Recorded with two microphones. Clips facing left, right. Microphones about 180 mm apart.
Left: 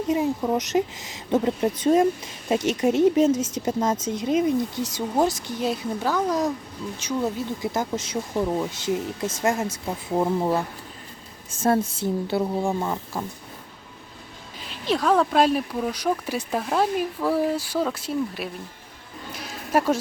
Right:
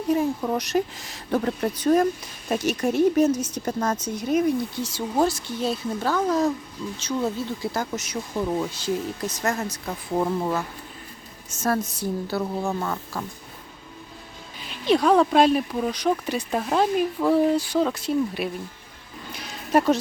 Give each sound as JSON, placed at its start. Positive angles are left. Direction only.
{"t": 0.1, "sound": "speech", "side_deg": 20}
{"t": 8.4, "sound": "speech", "side_deg": 15}
{"t": 10.1, "sound": "speech", "side_deg": 15}
{"t": 11.6, "sound": "speech", "side_deg": 30}
{"t": 14.8, "sound": "speech", "side_deg": 0}
{"t": 19.3, "sound": "a sound", "side_deg": 0}